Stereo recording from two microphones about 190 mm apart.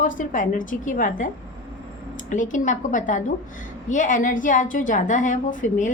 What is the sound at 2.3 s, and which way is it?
A woman's voice, 40° left (ahead or behind).